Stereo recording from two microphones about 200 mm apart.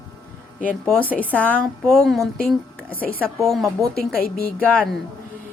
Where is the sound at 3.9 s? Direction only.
45° left (ahead or behind).